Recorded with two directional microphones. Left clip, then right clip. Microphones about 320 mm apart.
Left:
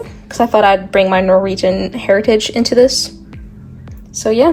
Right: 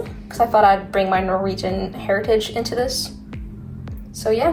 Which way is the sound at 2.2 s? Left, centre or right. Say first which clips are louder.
Left 6 dB; left.